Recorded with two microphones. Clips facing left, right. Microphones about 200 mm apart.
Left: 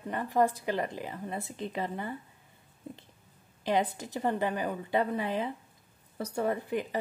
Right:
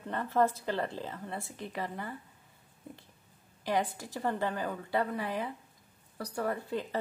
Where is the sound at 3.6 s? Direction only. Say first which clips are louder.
Left 3 dB; 20° left (ahead or behind).